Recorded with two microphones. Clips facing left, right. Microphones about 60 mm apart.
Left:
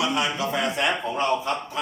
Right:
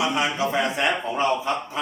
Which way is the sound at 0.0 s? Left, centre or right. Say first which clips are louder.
Right 2 dB; right.